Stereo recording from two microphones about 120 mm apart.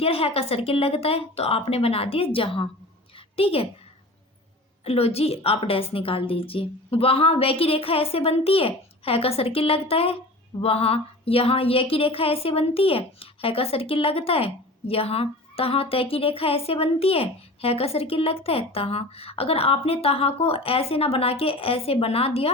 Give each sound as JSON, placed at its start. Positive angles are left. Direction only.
{"t": 0.0, "sound": "speech", "side_deg": 55}
{"t": 4.9, "sound": "speech", "side_deg": 55}